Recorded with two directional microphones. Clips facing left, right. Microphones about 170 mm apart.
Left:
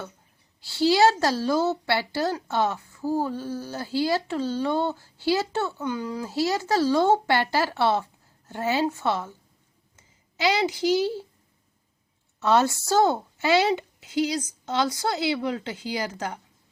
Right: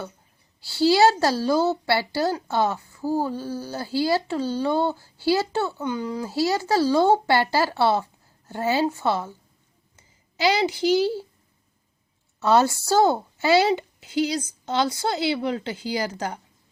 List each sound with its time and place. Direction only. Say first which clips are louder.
0.6 s a woman's voice: right 2 dB; 35° right (ahead or behind)
12.4 s a woman's voice: right 2 dB; 35° right (ahead or behind)